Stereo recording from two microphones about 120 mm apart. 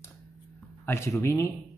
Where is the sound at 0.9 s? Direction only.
20° left (ahead or behind).